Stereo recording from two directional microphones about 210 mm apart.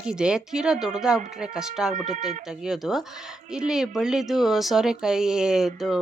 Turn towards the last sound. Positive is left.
turn(degrees=0)  # may be behind; listen again after turning